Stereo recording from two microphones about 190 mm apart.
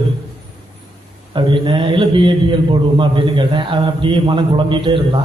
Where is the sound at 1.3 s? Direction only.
25° right (ahead or behind).